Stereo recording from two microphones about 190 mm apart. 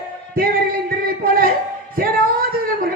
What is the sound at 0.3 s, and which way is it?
Music, 50° right (ahead or behind).